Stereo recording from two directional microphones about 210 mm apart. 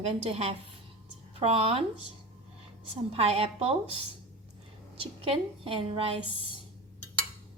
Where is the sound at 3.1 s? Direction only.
30° right (ahead or behind).